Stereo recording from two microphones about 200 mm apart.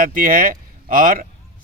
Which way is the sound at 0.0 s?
40° right (ahead or behind).